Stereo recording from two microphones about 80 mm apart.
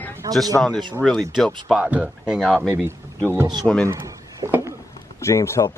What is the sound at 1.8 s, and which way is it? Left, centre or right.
Speech, centre.